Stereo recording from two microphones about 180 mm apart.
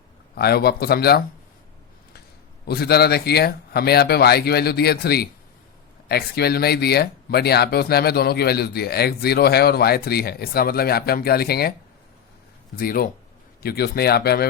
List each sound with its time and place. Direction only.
0.3 s speech: 60° left (ahead or behind)
2.6 s speech: 60° left (ahead or behind)
12.7 s speech: 50° left (ahead or behind)